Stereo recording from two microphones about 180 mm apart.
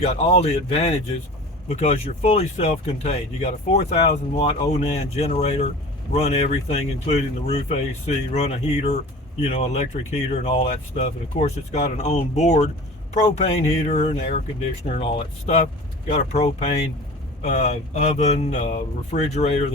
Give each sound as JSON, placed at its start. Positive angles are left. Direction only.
{"t": 0.0, "sound": "speech", "side_deg": 35}